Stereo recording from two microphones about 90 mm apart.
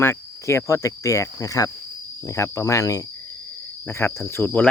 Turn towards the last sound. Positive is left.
turn(degrees=25)  # may be behind; listen again after turning